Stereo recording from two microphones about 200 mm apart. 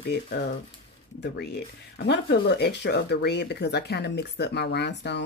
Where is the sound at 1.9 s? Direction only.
55° left (ahead or behind).